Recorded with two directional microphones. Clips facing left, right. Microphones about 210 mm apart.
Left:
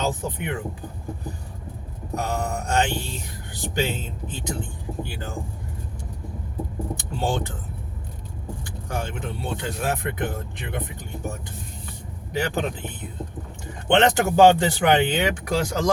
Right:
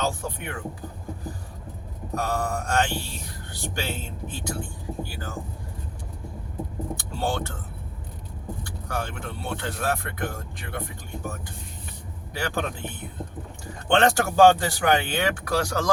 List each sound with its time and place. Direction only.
0.0 s speech: 20° left (ahead or behind)
2.1 s speech: 20° left (ahead or behind)
6.9 s speech: 15° left (ahead or behind)
8.9 s speech: 20° left (ahead or behind)
12.3 s speech: 20° left (ahead or behind)